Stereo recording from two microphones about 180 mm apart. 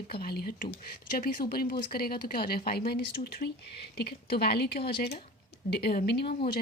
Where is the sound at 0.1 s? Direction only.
60° left (ahead or behind).